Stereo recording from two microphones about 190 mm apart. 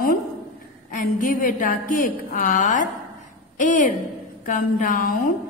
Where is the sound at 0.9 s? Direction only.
45° left (ahead or behind).